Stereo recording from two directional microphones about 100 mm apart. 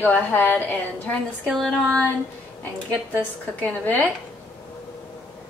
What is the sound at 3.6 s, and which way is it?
Speech, 15° left (ahead or behind).